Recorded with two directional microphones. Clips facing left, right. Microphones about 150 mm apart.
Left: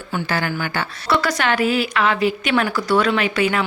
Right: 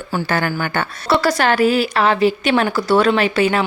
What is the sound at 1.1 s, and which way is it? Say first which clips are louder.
A woman's voice: right 4 dB; 30° right (ahead or behind).